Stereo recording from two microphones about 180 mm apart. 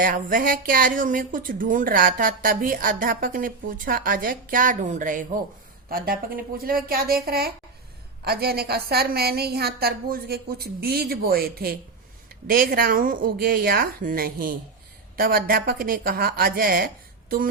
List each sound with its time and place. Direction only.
0.0 s a woman's voice: 50° right (ahead or behind)